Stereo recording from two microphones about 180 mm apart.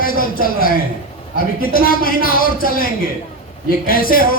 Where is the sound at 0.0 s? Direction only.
50° left (ahead or behind).